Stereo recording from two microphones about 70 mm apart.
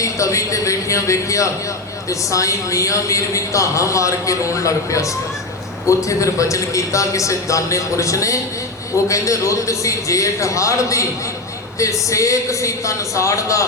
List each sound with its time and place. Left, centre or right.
0.0 s a man's voice: left